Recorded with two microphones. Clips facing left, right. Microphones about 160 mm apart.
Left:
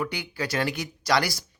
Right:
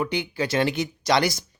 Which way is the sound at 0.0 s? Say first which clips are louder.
Right 5 dB; 25° right (ahead or behind).